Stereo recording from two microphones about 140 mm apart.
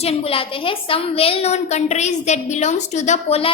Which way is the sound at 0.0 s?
45° left (ahead or behind).